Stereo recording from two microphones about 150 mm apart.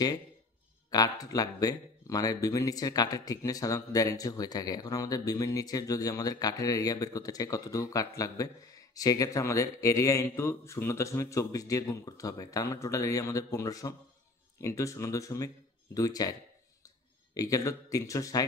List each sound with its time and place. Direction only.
0.8 s speech: 25° left (ahead or behind)